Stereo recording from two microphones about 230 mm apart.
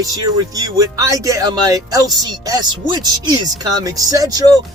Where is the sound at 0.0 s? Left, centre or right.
Centre.